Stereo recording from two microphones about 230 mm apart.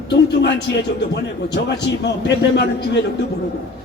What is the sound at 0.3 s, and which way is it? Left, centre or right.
Speech, left.